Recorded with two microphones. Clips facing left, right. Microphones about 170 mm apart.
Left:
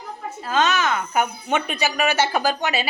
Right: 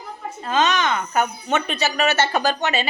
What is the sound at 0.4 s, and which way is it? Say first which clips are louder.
Speech: right 1 dB; centre (ahead or behind).